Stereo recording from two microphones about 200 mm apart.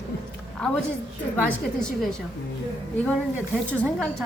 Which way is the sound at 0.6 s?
5° left (ahead or behind).